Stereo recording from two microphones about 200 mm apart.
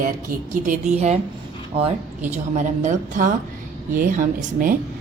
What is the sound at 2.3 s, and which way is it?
A woman's voice, 35° right (ahead or behind).